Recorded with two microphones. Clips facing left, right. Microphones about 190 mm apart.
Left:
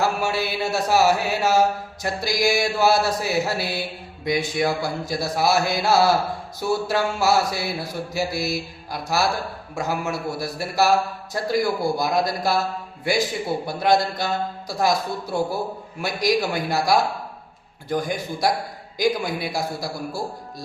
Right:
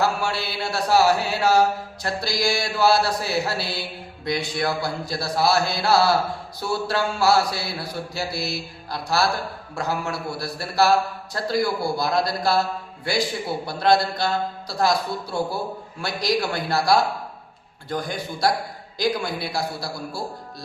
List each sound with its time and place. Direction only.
0.0 s speech: 15° left (ahead or behind)
13.7 s speech: 15° left (ahead or behind)